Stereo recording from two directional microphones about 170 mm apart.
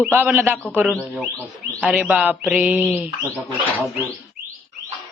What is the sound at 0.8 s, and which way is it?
Speech, 5° left (ahead or behind).